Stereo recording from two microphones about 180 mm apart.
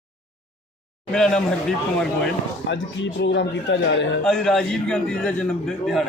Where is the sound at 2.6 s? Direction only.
80° left.